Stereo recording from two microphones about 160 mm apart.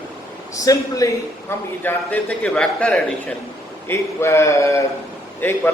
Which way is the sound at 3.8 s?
15° left (ahead or behind).